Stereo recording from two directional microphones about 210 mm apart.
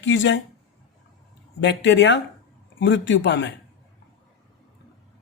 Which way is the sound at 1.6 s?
60° left (ahead or behind).